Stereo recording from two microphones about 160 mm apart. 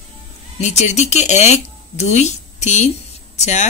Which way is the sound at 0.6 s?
45° left (ahead or behind).